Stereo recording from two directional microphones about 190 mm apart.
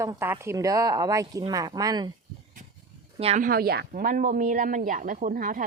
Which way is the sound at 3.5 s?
55° right (ahead or behind).